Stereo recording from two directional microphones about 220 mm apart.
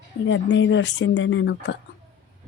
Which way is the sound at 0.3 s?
55° left (ahead or behind).